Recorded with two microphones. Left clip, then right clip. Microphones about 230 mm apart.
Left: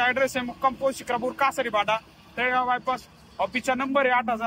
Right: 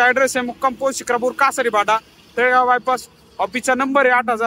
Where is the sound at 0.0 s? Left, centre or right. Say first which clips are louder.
Right 8 dB; centre.